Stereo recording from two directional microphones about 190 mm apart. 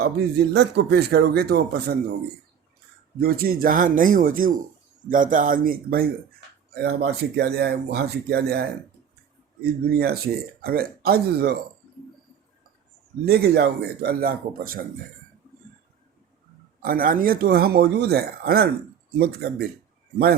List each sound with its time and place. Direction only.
0.0 s speech: 60° right (ahead or behind)
3.2 s speech: 55° right (ahead or behind)
9.9 s speech: 55° right (ahead or behind)
13.2 s speech: 55° right (ahead or behind)
16.8 s speech: 50° right (ahead or behind)